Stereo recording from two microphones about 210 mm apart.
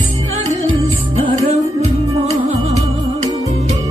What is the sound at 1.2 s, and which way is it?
Music, 30° right (ahead or behind).